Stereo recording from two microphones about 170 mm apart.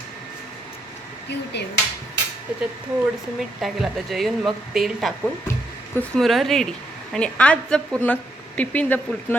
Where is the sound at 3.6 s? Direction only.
Centre (ahead or behind).